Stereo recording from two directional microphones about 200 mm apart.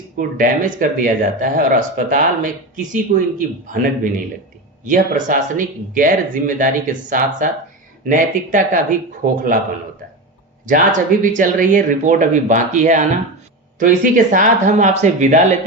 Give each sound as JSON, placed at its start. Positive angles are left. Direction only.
{"t": 0.2, "sound": "speech", "side_deg": -45}
{"t": 11.2, "sound": "speech", "side_deg": -40}